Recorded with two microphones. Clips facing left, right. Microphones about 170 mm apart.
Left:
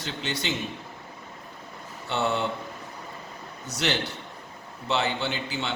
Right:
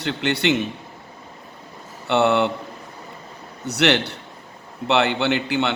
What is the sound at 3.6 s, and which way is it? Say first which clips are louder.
A man's voice: right 9 dB; 70° right (ahead or behind).